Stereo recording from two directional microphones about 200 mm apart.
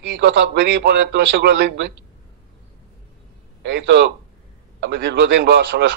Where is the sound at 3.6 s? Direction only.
55° right (ahead or behind).